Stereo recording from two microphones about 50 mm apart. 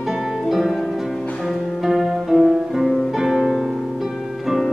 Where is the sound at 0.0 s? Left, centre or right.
Centre.